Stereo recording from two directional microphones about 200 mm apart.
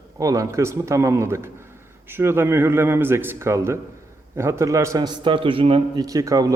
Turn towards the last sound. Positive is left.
turn(degrees=-15)  # may be behind; listen again after turning